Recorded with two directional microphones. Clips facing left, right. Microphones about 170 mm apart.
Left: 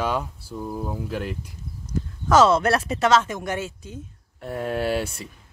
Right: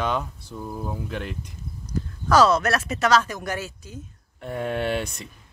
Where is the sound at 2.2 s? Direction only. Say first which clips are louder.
Left 1 dB; 25° left (ahead or behind).